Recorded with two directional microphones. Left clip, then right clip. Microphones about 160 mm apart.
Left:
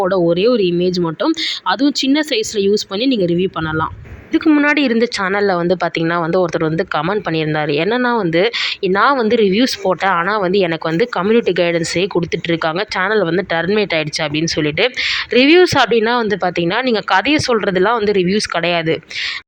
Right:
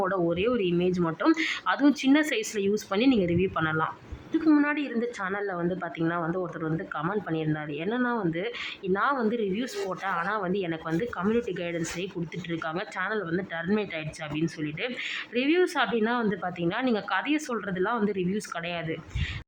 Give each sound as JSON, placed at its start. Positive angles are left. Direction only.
{"t": 0.0, "sound": "a woman's voice", "side_deg": 35}
{"t": 4.6, "sound": "speech", "side_deg": 40}